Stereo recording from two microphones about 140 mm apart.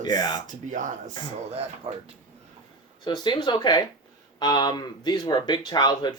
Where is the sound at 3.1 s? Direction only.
30° left (ahead or behind).